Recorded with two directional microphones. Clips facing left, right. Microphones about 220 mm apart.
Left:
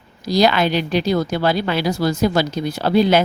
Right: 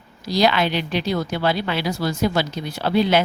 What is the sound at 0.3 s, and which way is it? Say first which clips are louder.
Speech: left 3 dB; 40° left (ahead or behind).